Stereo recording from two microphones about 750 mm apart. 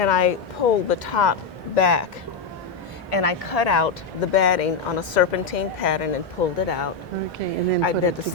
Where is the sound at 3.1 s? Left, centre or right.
Left.